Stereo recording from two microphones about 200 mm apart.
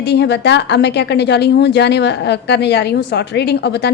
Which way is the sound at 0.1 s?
60° left (ahead or behind).